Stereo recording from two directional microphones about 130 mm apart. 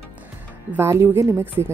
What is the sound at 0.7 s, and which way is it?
A woman's voice, 20° right (ahead or behind).